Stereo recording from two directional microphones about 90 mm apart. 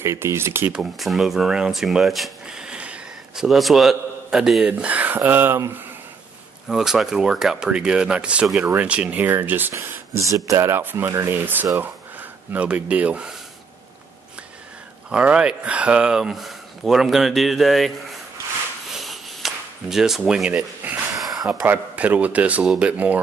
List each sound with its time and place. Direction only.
0.0 s speech: 30° right (ahead or behind)
0.7 s speech: centre (ahead or behind)
3.4 s a man's voice: centre (ahead or behind); by 5.6 s 20° right (ahead or behind)
6.7 s a man's voice: 5° right (ahead or behind); by 9.8 s 25° right (ahead or behind)
9.8 s speech: 35° right (ahead or behind)
10.8 s speech: 25° right (ahead or behind)
15.0 s speech: 10° right (ahead or behind)
18.9 s a sound: centre (ahead or behind)
21.5 s a man's voice: 15° right (ahead or behind)